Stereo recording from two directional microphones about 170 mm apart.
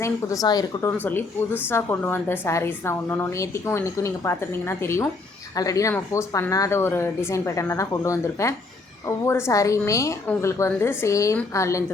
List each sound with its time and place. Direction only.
0.0 s a woman's voice: 20° left (ahead or behind)